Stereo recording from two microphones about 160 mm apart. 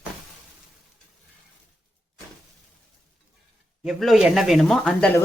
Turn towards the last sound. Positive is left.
turn(degrees=0)  # may be behind; listen again after turning